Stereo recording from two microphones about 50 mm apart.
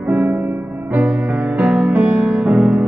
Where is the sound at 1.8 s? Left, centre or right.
Right.